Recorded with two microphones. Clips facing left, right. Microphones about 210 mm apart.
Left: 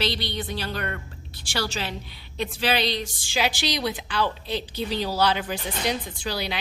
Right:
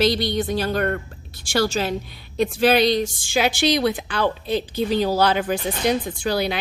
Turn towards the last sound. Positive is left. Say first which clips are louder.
# right 7 dB
turn(degrees=-50)  # may be behind; listen again after turning